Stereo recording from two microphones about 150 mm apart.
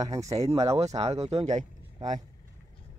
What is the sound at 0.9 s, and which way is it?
Speech, 45° right (ahead or behind).